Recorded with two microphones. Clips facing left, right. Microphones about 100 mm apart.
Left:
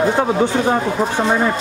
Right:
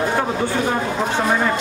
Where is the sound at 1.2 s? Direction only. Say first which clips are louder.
Left 2 dB; 15° left (ahead or behind).